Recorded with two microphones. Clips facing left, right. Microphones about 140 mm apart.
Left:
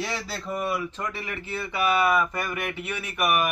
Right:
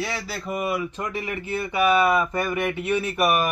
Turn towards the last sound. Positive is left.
turn(degrees=-30)  # may be behind; listen again after turning